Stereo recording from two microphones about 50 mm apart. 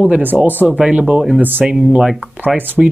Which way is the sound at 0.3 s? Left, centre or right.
Right.